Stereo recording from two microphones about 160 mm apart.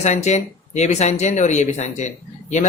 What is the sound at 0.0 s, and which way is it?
Speech, 45° left (ahead or behind).